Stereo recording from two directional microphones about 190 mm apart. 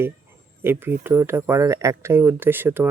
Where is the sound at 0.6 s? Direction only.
10° right (ahead or behind).